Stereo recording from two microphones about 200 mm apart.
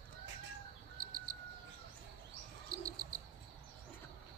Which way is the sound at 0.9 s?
45° right (ahead or behind).